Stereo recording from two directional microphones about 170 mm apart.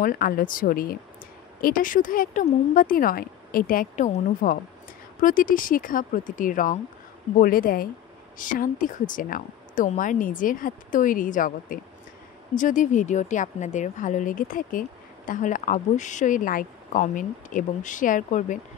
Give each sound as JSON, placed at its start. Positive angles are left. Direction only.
{"t": 0.0, "sound": "a woman's voice", "side_deg": 55}